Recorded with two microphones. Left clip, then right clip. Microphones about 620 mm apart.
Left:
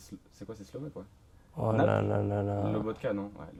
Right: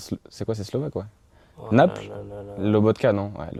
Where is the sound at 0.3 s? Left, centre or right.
Right.